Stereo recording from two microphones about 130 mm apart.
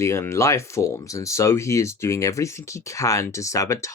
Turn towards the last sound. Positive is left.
turn(degrees=25)  # may be behind; listen again after turning